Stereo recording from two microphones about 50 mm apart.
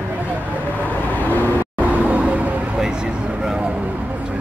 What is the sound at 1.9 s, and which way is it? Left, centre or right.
Vehicle, right.